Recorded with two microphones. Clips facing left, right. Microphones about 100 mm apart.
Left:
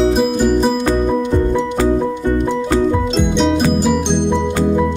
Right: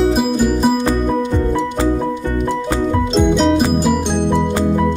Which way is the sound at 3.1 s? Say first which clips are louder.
Right 2 dB; 5° right (ahead or behind).